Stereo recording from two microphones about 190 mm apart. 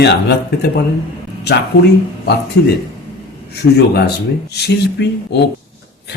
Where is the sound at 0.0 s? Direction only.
60° left (ahead or behind).